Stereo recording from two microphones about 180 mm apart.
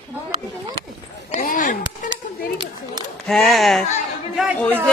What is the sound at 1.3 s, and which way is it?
Speech, 45° left (ahead or behind).